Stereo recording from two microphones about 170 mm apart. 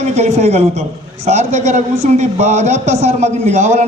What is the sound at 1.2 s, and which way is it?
A man's voice, 45° right (ahead or behind).